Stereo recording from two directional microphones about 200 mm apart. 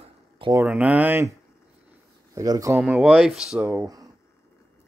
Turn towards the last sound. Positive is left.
turn(degrees=-20)  # may be behind; listen again after turning